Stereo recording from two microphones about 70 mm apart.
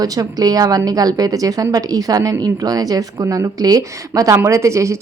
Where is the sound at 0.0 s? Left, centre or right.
Right.